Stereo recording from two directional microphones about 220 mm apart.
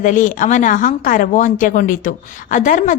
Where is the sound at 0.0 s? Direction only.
35° left (ahead or behind).